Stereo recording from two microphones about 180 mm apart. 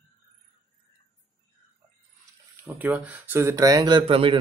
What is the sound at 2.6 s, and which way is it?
Speech, 10° right (ahead or behind).